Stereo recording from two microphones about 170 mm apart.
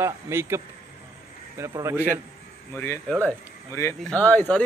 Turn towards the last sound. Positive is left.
turn(degrees=10)  # may be behind; listen again after turning